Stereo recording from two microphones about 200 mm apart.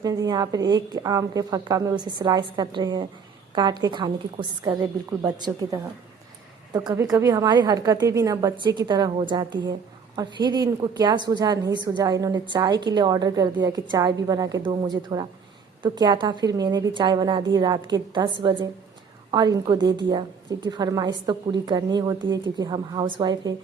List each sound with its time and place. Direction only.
0.0 s a woman's voice: 20° right (ahead or behind)